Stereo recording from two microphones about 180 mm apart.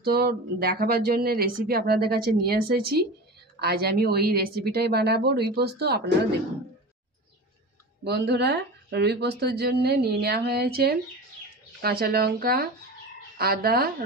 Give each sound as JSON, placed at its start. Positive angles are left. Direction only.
{"t": 0.0, "sound": "speech", "side_deg": -60}
{"t": 8.0, "sound": "speech", "side_deg": -65}